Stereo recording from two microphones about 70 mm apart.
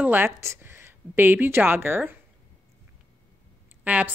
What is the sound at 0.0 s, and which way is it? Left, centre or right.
A woman's voice, right.